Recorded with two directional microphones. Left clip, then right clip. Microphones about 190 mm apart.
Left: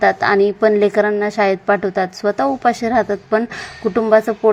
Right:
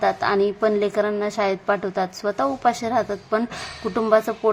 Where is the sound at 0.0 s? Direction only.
20° left (ahead or behind).